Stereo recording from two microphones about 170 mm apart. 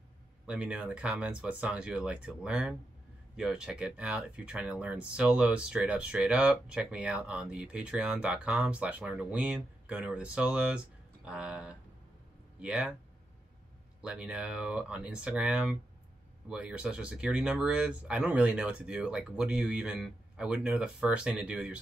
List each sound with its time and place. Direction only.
0.5 s speech: 5° right (ahead or behind)
14.0 s speech: 5° right (ahead or behind)